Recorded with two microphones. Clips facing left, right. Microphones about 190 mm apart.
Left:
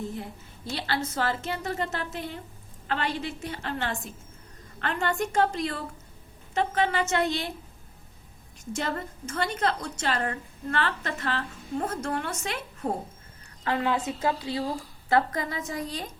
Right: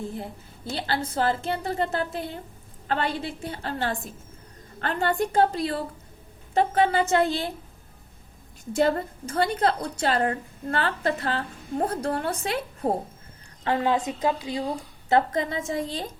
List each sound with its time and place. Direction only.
0.7 s a woman's voice: 30° right (ahead or behind)
8.7 s a woman's voice: 35° right (ahead or behind)
13.7 s a woman's voice: 25° right (ahead or behind)